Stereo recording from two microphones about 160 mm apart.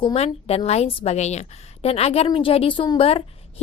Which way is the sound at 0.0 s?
40° left (ahead or behind).